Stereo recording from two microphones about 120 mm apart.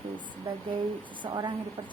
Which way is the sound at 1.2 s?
40° right (ahead or behind).